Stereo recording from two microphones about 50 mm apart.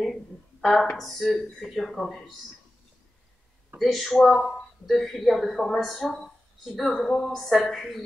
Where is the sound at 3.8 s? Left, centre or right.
Centre.